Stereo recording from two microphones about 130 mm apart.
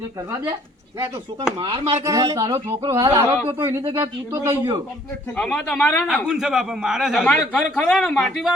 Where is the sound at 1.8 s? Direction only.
55° right (ahead or behind).